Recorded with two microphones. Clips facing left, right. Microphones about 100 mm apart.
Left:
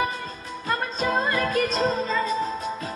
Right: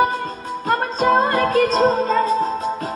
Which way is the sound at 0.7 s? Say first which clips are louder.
Right 8 dB; 45° right (ahead or behind).